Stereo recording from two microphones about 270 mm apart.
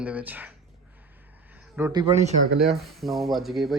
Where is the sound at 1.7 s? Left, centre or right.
Centre.